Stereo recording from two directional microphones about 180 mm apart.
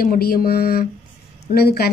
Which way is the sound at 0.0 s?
55° left (ahead or behind).